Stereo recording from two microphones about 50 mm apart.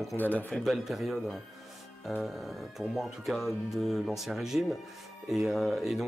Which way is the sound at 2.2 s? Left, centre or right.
Centre.